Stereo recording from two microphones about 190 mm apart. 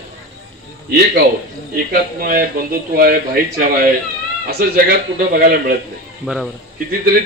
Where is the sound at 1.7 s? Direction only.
50° right (ahead or behind).